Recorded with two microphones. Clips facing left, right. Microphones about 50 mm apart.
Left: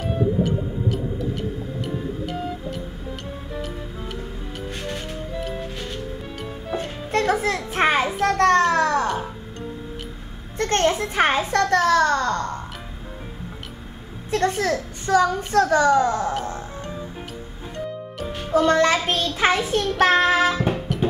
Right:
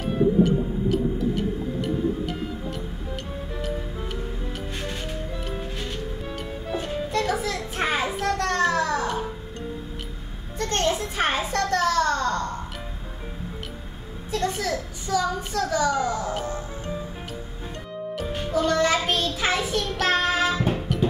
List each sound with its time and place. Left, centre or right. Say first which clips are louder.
0.0 s music: right 2 dB; centre
7.1 s music: left 6 dB; left
10.6 s a child's voice: left 4 dB; left
14.3 s a child's voice: left 5 dB; left
18.5 s a child's voice: left 4 dB; left
20.0 s child singing: left 6 dB; left
20.9 s music: even; centre